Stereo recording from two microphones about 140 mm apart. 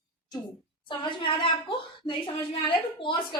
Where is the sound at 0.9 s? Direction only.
35° left (ahead or behind).